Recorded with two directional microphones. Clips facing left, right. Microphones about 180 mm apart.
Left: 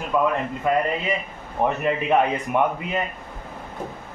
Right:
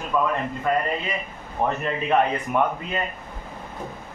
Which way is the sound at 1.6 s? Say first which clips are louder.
Left 3 dB; 15° left (ahead or behind).